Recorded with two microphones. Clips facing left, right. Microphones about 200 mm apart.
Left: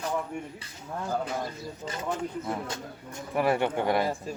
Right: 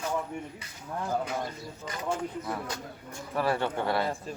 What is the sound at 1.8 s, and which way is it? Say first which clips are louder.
Speech: even; 25° left (ahead or behind).